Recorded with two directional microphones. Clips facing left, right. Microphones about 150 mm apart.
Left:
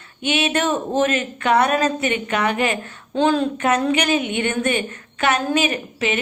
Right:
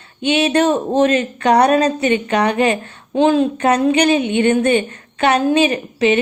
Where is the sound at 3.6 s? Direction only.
35° right (ahead or behind).